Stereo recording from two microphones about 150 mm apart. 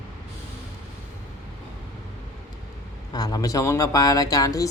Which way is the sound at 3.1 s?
25° left (ahead or behind).